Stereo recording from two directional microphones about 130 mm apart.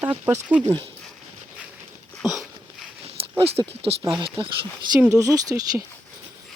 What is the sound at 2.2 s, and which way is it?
Dog, centre (ahead or behind).